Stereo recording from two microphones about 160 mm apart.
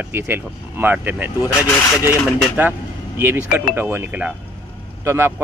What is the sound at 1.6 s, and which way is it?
Speech, 15° left (ahead or behind).